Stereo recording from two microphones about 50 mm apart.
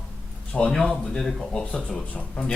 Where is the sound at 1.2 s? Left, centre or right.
Centre.